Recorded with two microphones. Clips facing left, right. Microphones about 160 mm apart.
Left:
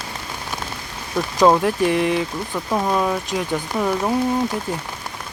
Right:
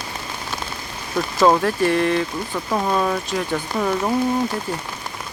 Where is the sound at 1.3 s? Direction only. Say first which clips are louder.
Left 1 dB; 10° left (ahead or behind).